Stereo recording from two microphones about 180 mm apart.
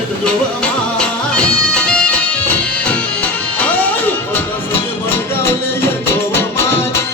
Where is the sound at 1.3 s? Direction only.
5° left (ahead or behind).